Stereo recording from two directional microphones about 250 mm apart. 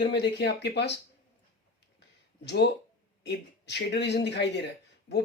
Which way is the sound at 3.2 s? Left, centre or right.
Left.